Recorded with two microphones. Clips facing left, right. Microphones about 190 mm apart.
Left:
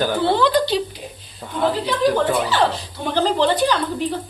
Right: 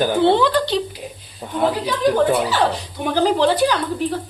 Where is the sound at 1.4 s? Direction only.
15° right (ahead or behind).